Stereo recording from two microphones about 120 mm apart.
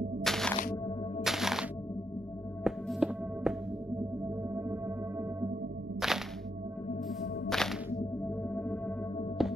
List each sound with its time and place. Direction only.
0.2 s music: 5° left (ahead or behind)
4.6 s music: 20° right (ahead or behind)
5.9 s music: 5° right (ahead or behind)
8.5 s music: 15° left (ahead or behind)
9.4 s music: centre (ahead or behind)